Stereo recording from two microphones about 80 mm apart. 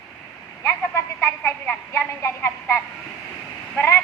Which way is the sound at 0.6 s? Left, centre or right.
Left.